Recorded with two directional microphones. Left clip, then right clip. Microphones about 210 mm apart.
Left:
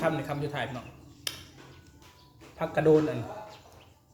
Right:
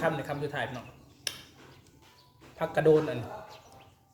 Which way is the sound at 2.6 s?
5° right (ahead or behind).